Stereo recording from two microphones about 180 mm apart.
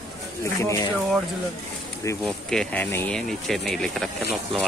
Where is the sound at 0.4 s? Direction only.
15° left (ahead or behind).